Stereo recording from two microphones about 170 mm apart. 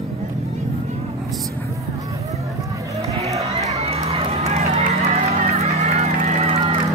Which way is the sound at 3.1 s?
40° right (ahead or behind).